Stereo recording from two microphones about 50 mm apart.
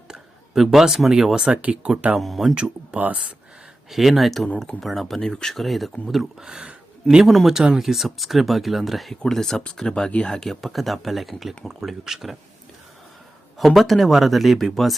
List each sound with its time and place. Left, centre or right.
0.1 s speech: centre
1.6 s speech: right
2.1 s speech: centre
2.9 s speech: right
3.8 s speech: centre
4.4 s speech: left
4.8 s speech: centre
5.6 s speech: centre
6.4 s speech: centre
7.3 s speech: centre
9.2 s speech: centre
10.3 s speech: centre
13.6 s speech: centre